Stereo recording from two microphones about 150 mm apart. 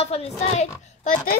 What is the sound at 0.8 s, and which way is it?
Speech, 60° left (ahead or behind).